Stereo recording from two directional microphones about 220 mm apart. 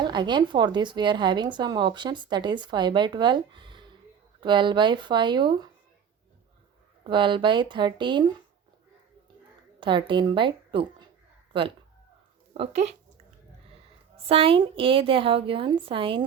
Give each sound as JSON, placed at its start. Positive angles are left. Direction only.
{"t": 0.0, "sound": "a woman's voice", "side_deg": -20}
{"t": 7.0, "sound": "a woman's voice", "side_deg": -20}
{"t": 9.8, "sound": "a woman's voice", "side_deg": -20}
{"t": 14.3, "sound": "a woman's voice", "side_deg": -25}